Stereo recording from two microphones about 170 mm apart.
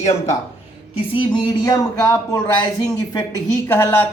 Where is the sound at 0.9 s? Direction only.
30° left (ahead or behind).